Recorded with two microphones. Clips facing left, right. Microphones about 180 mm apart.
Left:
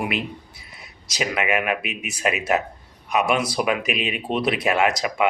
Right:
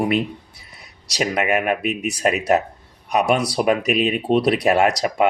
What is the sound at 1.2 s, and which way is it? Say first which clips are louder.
A man's voice: right 3 dB; 40° right (ahead or behind).